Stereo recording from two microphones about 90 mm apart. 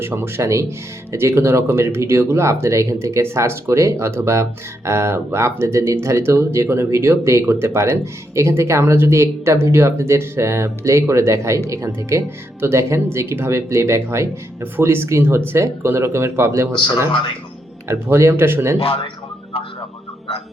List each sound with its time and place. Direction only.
0.0 s speech: 25° right (ahead or behind)
17.1 s speech: 75° left (ahead or behind)
17.8 s speech: 30° right (ahead or behind)
18.8 s speech: 90° left